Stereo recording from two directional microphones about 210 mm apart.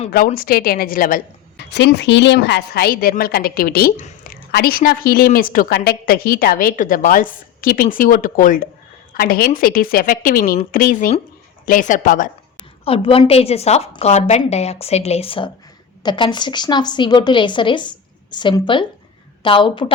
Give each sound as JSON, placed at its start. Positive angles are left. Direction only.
{"t": 0.3, "sound": "a woman's voice", "side_deg": 45}
{"t": 1.7, "sound": "a woman's voice", "side_deg": 55}
{"t": 12.8, "sound": "a woman's voice", "side_deg": 25}